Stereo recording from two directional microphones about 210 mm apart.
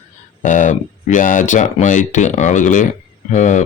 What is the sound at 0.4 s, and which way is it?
Speech, 35° left (ahead or behind).